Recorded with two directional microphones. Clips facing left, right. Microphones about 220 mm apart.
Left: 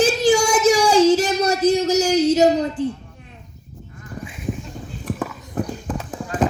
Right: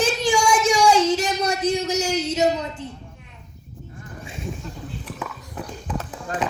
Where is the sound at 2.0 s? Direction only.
35° left (ahead or behind).